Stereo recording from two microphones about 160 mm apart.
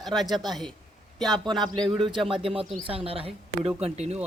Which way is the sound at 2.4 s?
35° right (ahead or behind).